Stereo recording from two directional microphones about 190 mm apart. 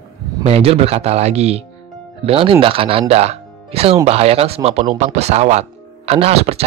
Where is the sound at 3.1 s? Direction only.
35° right (ahead or behind).